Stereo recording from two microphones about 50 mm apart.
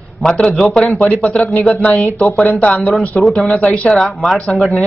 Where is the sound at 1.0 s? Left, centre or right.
Left.